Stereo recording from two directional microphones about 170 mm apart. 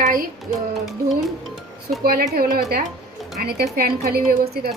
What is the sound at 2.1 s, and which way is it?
A woman's voice, 60° right (ahead or behind).